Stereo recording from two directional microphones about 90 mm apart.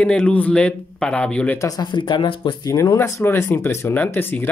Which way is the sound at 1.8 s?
60° left (ahead or behind).